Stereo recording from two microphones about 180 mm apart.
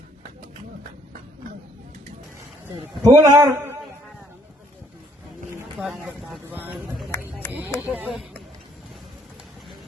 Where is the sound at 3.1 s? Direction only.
20° right (ahead or behind).